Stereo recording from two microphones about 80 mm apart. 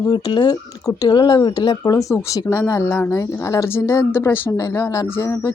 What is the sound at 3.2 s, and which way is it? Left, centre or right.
A woman's voice, left.